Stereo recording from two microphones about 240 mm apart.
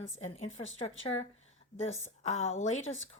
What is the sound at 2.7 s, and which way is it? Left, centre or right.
Speech, left.